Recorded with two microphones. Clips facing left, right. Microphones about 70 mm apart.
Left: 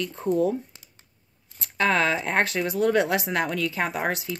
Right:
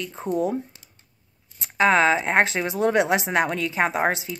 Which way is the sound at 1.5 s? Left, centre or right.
Right.